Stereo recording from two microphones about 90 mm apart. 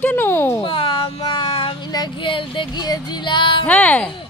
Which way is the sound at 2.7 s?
50° left (ahead or behind).